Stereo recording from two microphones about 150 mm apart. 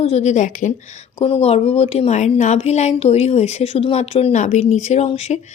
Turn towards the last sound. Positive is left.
turn(degrees=45)  # may be behind; listen again after turning